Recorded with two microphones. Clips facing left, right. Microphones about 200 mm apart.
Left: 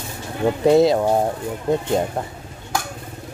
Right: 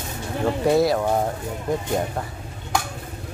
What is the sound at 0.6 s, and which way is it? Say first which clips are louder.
Speech: left 5 dB; 20° left (ahead or behind).